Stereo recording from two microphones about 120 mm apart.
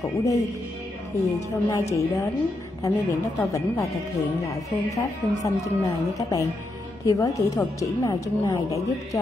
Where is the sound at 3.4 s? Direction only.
25° left (ahead or behind).